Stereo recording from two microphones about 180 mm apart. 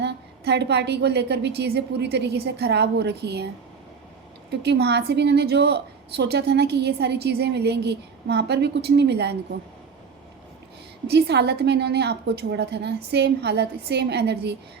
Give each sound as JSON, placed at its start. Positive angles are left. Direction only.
{"t": 0.0, "sound": "a woman's voice", "side_deg": -70}
{"t": 4.6, "sound": "a woman's voice", "side_deg": -65}
{"t": 11.0, "sound": "a woman's voice", "side_deg": -65}